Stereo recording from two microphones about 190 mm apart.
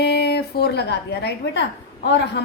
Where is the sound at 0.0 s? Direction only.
60° left (ahead or behind).